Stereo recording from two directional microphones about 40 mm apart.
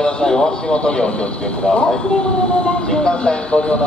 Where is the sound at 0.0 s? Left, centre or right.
Centre.